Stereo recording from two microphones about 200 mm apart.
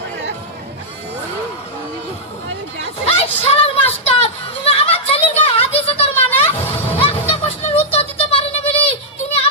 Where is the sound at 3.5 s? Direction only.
30° left (ahead or behind).